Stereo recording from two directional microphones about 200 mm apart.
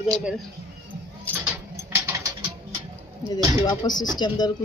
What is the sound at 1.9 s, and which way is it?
Rodents, 15° right (ahead or behind).